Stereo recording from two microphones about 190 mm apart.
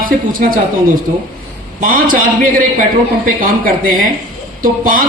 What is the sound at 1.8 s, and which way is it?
A man's voice, 45° right (ahead or behind).